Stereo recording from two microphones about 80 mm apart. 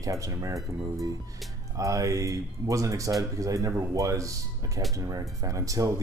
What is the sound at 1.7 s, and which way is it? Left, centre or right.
Speech, right.